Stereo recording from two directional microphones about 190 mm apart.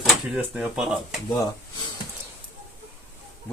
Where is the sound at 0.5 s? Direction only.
Centre (ahead or behind).